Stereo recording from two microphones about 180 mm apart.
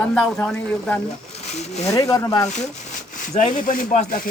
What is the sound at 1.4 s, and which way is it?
Speech, 40° left (ahead or behind).